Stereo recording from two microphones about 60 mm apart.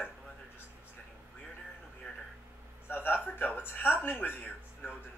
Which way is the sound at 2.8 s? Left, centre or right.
Left.